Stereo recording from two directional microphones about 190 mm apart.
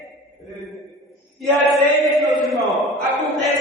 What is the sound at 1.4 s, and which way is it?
Chant, centre (ahead or behind).